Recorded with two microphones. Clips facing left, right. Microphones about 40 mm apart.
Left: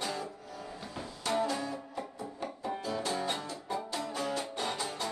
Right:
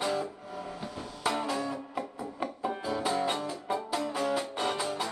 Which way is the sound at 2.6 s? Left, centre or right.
Centre.